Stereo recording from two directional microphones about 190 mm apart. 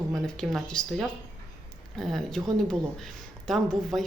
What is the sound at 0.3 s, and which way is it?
Speech, centre (ahead or behind).